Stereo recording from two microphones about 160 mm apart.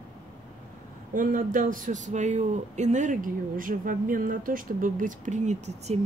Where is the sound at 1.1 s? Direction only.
55° right (ahead or behind).